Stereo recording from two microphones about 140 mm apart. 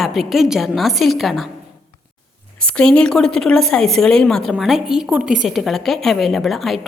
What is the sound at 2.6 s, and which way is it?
A woman's voice, 5° left (ahead or behind).